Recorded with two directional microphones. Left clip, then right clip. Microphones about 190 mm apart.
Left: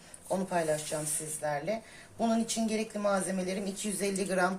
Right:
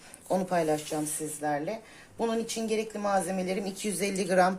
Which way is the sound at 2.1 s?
35° right (ahead or behind).